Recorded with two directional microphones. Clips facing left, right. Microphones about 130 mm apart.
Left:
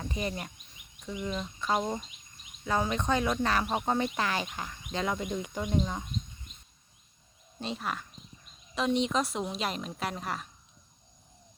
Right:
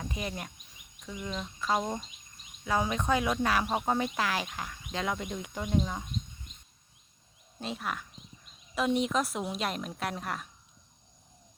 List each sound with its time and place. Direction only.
0.0 s speech: centre (ahead or behind)
7.6 s speech: centre (ahead or behind)